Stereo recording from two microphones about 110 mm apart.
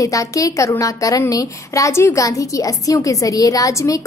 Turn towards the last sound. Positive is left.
turn(degrees=30)  # may be behind; listen again after turning